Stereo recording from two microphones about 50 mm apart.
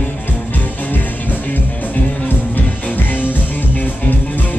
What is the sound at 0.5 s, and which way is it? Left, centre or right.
Music, left.